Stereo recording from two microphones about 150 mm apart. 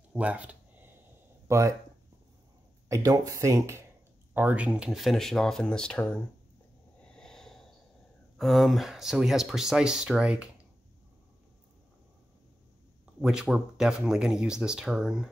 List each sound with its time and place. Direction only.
0.1 s speech: 10° right (ahead or behind)
1.5 s speech: 20° right (ahead or behind)
2.9 s speech: 25° right (ahead or behind); by 6.1 s 5° left (ahead or behind)
7.1 s snort: 5° left (ahead or behind)
8.4 s speech: centre (ahead or behind)
13.2 s speech: 5° right (ahead or behind)